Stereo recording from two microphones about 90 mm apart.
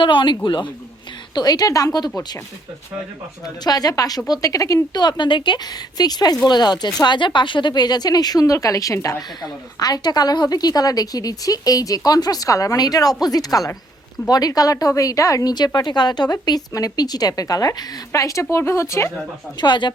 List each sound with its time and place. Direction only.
0.0 s speech: 65° left (ahead or behind)
1.4 s speech: 45° left (ahead or behind)
3.4 s speech: 45° left (ahead or behind)
6.0 s speech: 50° left (ahead or behind); by 19.1 s 30° left (ahead or behind)
19.5 s speech: 60° left (ahead or behind)